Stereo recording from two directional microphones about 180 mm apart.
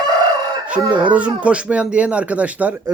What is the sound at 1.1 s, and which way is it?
Speech, 5° right (ahead or behind).